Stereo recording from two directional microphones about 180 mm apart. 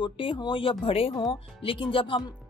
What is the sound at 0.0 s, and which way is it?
A woman's voice, 25° left (ahead or behind).